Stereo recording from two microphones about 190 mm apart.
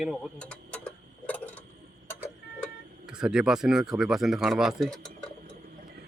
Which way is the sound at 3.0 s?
5° right (ahead or behind).